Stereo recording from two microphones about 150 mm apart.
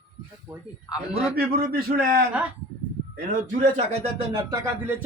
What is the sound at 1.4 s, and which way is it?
Speech, 80° right.